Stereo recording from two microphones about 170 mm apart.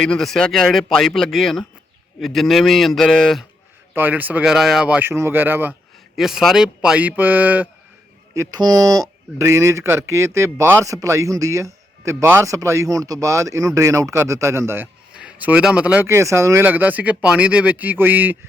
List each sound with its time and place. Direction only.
0.0 s a man's voice: 5° left (ahead or behind)
3.9 s speech: 10° right (ahead or behind)
8.3 s speech: 20° right (ahead or behind)